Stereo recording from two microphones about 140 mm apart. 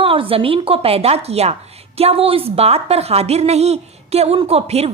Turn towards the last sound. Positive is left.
turn(degrees=-45)  # may be behind; listen again after turning